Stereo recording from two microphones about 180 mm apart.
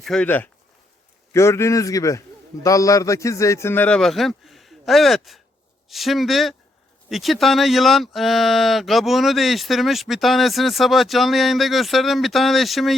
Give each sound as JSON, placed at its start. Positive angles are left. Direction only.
{"t": 0.0, "sound": "a man's voice", "side_deg": 5}